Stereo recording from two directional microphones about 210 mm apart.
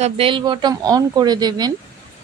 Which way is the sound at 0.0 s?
25° right (ahead or behind).